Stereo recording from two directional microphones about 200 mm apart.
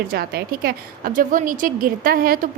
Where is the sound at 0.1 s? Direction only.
50° right (ahead or behind).